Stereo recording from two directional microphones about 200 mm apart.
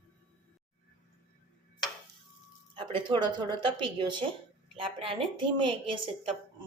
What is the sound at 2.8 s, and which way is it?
A woman's voice, 25° right (ahead or behind).